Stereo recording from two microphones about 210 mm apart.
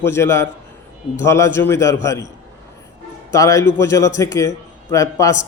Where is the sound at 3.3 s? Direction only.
15° left (ahead or behind).